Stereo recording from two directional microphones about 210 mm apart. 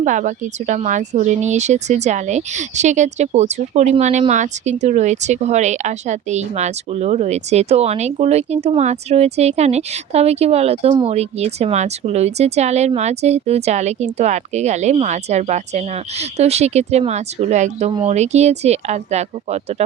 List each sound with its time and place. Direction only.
0.0 s speech: 35° right (ahead or behind)